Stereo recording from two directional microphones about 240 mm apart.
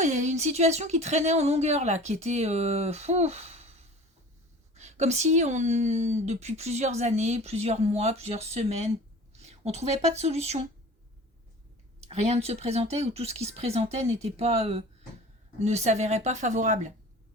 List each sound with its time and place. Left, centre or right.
0.0 s speech: right
12.0 s speech: right